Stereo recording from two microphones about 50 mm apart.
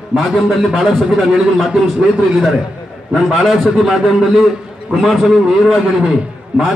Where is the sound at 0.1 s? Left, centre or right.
Right.